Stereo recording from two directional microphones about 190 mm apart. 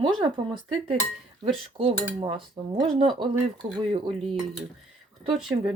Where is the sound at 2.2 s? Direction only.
25° right (ahead or behind).